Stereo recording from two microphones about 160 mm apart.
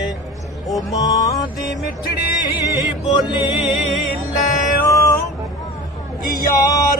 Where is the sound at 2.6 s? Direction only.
25° left (ahead or behind).